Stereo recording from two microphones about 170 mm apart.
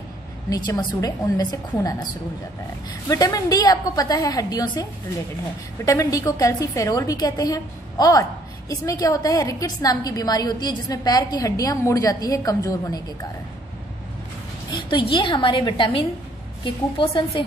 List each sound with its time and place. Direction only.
0.5 s a woman's voice: 25° left (ahead or behind)
5.9 s a woman's voice: 20° left (ahead or behind)
14.7 s a woman's voice: 25° left (ahead or behind)